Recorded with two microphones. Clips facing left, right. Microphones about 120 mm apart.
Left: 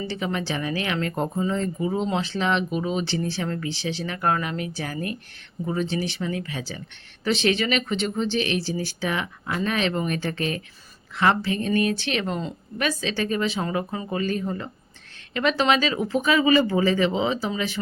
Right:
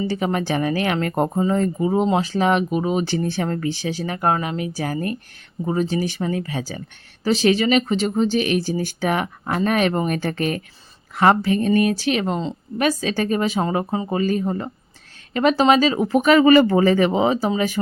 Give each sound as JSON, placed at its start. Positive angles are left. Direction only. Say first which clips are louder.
{"t": 0.1, "sound": "speech", "louder": "right 6 dB", "side_deg": -45}
{"t": 4.8, "sound": "speech", "louder": "right 5 dB", "side_deg": -40}
{"t": 12.9, "sound": "speech", "louder": "right 4 dB", "side_deg": -40}
{"t": 16.1, "sound": "speech", "louder": "right 7 dB", "side_deg": -65}
{"t": 16.7, "sound": "speech", "louder": "right 5 dB", "side_deg": -50}